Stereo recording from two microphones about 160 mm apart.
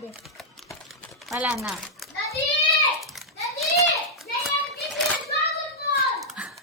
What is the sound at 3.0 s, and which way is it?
Typing, centre (ahead or behind).